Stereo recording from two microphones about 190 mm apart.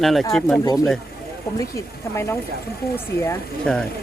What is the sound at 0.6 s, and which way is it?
Speech, 20° left (ahead or behind).